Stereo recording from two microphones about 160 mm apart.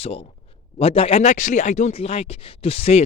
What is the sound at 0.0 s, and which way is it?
Speech, 35° left (ahead or behind).